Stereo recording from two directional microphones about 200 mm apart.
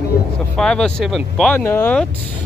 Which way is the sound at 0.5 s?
5° left (ahead or behind).